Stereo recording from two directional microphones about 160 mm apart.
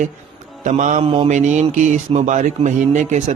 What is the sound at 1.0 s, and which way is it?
Speech, 35° right (ahead or behind).